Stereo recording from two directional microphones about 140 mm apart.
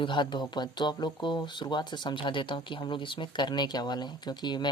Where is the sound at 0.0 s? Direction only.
35° left (ahead or behind).